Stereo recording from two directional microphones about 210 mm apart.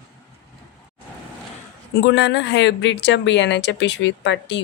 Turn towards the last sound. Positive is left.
turn(degrees=60)  # may be behind; listen again after turning